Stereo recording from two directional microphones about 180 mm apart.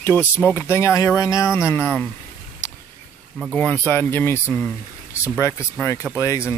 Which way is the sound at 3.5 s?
5° left (ahead or behind).